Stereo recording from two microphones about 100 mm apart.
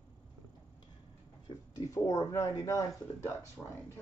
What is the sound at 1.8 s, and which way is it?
A woman's voice, 35° left (ahead or behind).